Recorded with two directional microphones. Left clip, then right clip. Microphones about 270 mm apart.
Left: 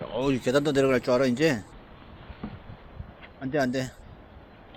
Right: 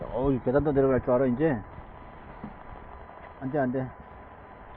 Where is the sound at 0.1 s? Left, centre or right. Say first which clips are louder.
Left 1 dB; left.